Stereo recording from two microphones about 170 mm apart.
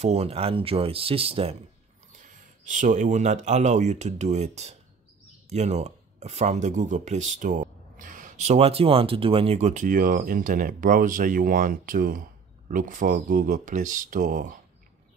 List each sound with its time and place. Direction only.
0.0 s speech: 40° right (ahead or behind)
2.1 s speech: 50° right (ahead or behind)